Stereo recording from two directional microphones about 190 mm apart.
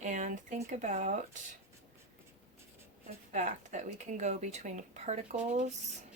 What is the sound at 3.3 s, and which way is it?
Speech, 40° right (ahead or behind).